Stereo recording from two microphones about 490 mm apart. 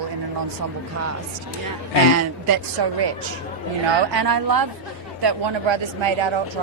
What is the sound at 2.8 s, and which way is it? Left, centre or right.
A woman's voice, right.